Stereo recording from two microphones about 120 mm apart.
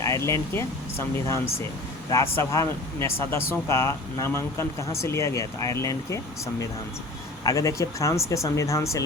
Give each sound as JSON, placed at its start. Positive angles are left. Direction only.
{"t": 0.0, "sound": "speech", "side_deg": 25}